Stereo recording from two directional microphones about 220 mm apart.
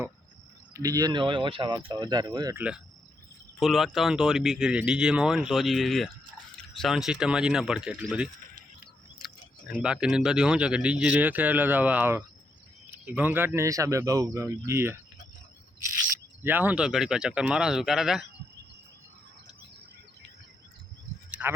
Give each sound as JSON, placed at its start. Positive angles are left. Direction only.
{"t": 0.7, "sound": "speech", "side_deg": -15}
{"t": 9.2, "sound": "speech", "side_deg": -5}
{"t": 16.4, "sound": "speech", "side_deg": -10}
{"t": 21.2, "sound": "a sound", "side_deg": -5}